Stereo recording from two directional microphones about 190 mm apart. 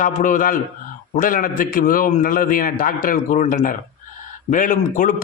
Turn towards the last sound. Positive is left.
turn(degrees=45)  # may be behind; listen again after turning